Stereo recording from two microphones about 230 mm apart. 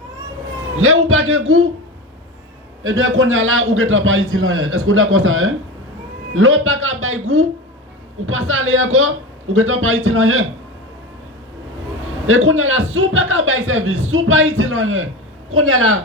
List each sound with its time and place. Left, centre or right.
0.8 s a man's voice: right
2.8 s a man's voice: right
12.2 s a man's voice: right